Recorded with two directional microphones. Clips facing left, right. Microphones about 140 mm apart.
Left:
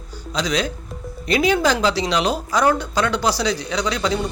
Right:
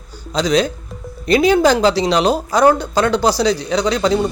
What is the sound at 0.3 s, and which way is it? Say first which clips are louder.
Speech: right 7 dB; 35° right (ahead or behind).